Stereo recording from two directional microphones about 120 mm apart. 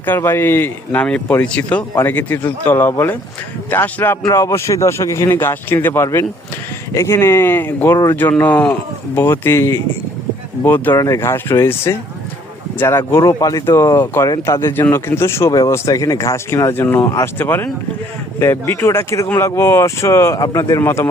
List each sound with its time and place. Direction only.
0.0 s speech: 15° left (ahead or behind)